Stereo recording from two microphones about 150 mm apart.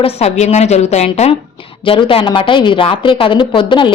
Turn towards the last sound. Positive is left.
turn(degrees=35)  # may be behind; listen again after turning